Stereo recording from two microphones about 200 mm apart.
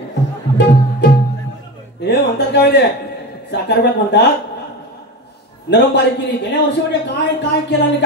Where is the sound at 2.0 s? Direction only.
55° left (ahead or behind).